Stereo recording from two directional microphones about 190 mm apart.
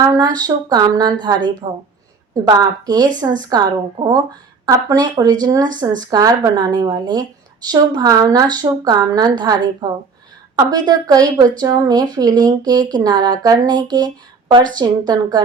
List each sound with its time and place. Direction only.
0.0 s a woman's voice: 20° right (ahead or behind)